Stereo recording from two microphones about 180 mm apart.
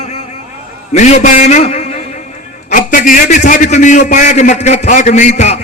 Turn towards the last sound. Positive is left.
turn(degrees=40)  # may be behind; listen again after turning